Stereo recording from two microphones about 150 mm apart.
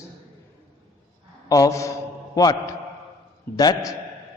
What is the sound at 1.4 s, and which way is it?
A man's voice, 25° left (ahead or behind).